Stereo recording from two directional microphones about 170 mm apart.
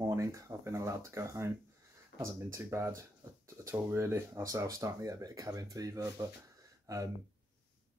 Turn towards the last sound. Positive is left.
turn(degrees=-15)  # may be behind; listen again after turning